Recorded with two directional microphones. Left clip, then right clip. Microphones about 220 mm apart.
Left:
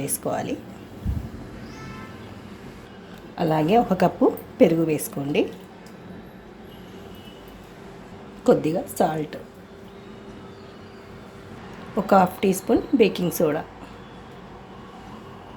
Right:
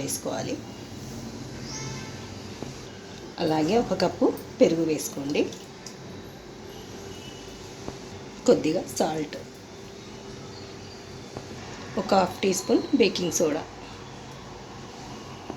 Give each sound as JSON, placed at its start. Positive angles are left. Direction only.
{"t": 0.0, "sound": "speech", "side_deg": 50}
{"t": 3.3, "sound": "speech", "side_deg": 50}
{"t": 8.4, "sound": "speech", "side_deg": 45}
{"t": 12.0, "sound": "speech", "side_deg": 45}